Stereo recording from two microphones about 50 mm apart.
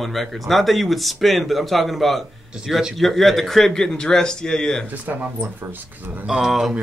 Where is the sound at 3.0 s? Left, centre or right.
Centre.